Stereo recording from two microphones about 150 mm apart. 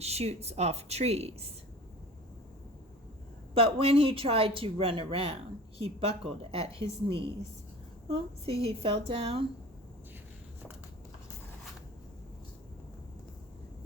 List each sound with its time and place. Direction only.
0.0 s a woman's voice: 45° right (ahead or behind)
3.5 s speech: 40° right (ahead or behind)